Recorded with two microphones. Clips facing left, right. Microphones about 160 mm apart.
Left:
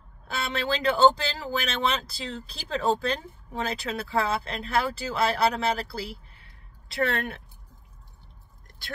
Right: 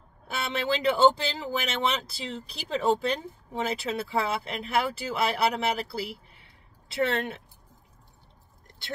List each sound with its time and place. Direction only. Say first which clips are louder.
0.3 s speech: even; 20° right (ahead or behind)